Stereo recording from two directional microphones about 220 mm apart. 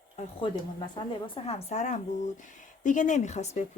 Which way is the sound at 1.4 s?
25° left (ahead or behind).